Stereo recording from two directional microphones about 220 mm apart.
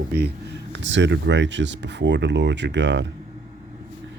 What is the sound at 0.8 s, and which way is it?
Speech, 55° right (ahead or behind).